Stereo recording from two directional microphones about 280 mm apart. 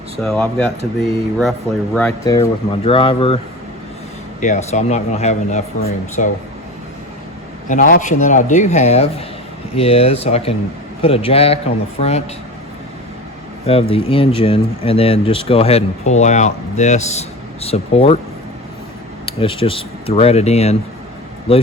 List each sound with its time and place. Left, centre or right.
0.2 s speech: centre; by 6.3 s left
7.7 s speech: left
13.7 s speech: centre
19.2 s speech: centre